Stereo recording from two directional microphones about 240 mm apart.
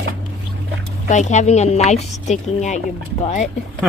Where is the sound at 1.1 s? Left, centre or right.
Left.